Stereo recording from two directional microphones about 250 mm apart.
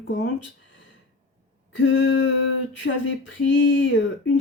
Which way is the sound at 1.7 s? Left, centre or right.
Left.